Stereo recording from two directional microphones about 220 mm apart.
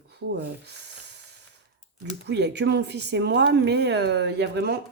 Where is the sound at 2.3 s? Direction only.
50° right (ahead or behind).